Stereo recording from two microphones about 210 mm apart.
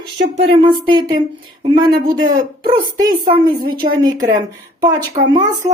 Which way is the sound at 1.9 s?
45° right (ahead or behind).